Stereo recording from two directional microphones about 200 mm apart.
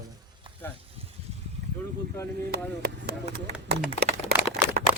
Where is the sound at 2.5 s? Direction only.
55° right (ahead or behind).